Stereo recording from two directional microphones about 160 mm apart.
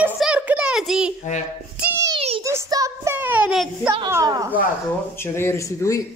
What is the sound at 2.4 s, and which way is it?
Child singing, 20° right (ahead or behind).